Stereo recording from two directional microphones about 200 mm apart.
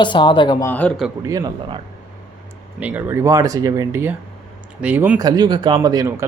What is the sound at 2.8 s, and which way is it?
Speech, 10° right (ahead or behind).